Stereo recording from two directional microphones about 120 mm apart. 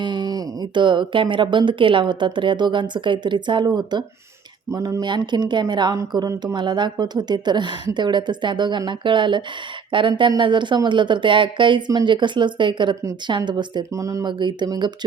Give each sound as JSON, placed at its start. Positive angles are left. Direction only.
{"t": 0.0, "sound": "speech", "side_deg": -40}
{"t": 13.9, "sound": "speech", "side_deg": -25}
{"t": 14.3, "sound": "speech", "side_deg": -40}